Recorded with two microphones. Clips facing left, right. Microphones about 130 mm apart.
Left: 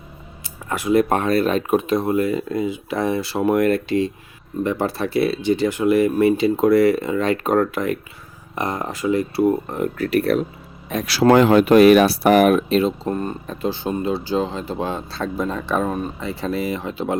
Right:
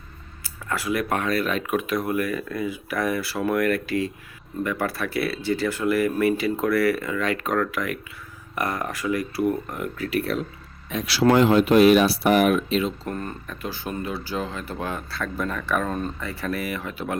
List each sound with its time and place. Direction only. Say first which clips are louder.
0.4 s speech: left 5 dB; 20° left (ahead or behind)
10.0 s speech: left 7 dB; 45° left (ahead or behind)
11.3 s speech: left 4 dB; 60° left (ahead or behind); by 12.9 s 45° left (ahead or behind)
13.1 s speech: left 7 dB; 25° left (ahead or behind)
15.9 s speech: left 3 dB; 10° left (ahead or behind)
16.2 s speech: left 5 dB; 20° left (ahead or behind)